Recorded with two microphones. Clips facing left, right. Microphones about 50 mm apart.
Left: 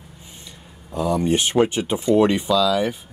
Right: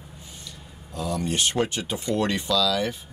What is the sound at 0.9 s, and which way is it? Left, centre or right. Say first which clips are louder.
Speech: left 8 dB; left.